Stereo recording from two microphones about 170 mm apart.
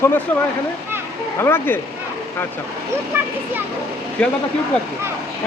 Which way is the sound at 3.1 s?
15° right (ahead or behind).